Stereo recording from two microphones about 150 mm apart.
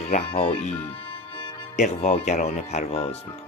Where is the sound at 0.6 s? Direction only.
40° left (ahead or behind).